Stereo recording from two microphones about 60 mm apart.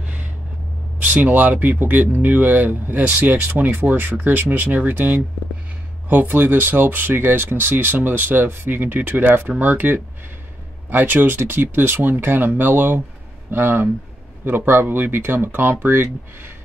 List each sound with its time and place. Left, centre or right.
0.0 s vehicle: right
1.0 s speech: right
3.1 s speech: right